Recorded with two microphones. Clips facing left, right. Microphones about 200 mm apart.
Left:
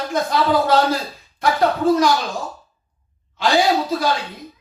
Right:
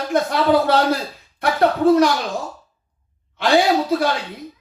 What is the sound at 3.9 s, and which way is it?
Speech, 60° right (ahead or behind).